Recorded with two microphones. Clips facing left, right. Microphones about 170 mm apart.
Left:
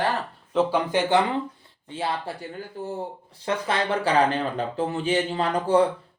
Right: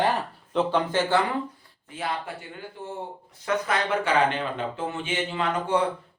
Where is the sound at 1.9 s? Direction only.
30° left (ahead or behind).